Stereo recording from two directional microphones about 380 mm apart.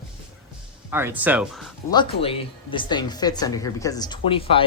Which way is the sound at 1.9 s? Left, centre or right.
Centre.